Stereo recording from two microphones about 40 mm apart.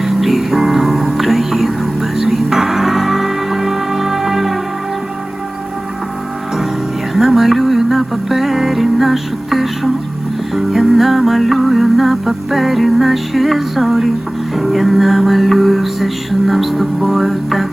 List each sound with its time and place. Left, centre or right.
0.0 s music: centre
7.1 s music: centre